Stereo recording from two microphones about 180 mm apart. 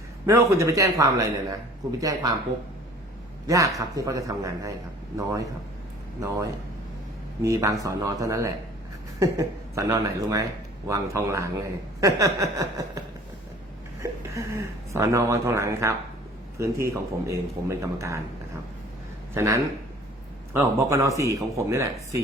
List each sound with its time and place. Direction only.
0.3 s a man's voice: 15° right (ahead or behind)
3.4 s a man's voice: 20° right (ahead or behind)
7.4 s speech: 15° right (ahead or behind)
14.0 s speech: 15° right (ahead or behind)
19.3 s speech: 15° right (ahead or behind)